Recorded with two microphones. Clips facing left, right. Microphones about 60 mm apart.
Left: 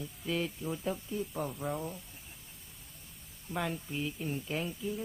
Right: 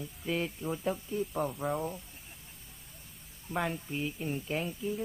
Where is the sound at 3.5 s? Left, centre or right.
Centre.